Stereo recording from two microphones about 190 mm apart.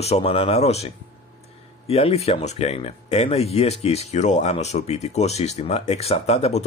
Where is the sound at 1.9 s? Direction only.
35° left (ahead or behind).